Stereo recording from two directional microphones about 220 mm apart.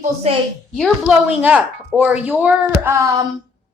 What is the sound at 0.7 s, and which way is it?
A woman's voice, centre (ahead or behind).